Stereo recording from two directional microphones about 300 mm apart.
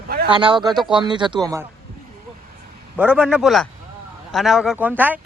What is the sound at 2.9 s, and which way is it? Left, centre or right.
Speech, centre.